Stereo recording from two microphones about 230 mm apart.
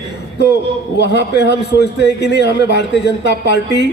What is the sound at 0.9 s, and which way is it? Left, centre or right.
A man's voice, left.